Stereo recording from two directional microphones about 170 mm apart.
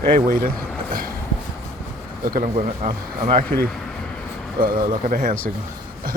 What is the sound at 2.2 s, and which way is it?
Speech, 55° right (ahead or behind).